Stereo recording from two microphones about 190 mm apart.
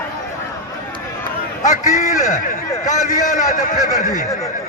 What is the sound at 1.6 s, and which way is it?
A man's voice, 40° left (ahead or behind).